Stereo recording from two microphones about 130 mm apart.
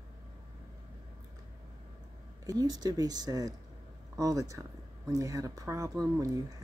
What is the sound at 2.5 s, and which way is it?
Speech, 30° right (ahead or behind).